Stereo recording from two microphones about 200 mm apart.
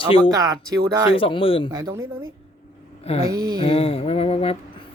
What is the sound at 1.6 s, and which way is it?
Speech, 20° right (ahead or behind).